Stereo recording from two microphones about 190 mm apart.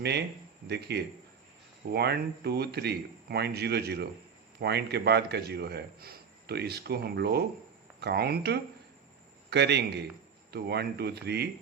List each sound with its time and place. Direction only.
0.0 s a man's voice: 60° right (ahead or behind)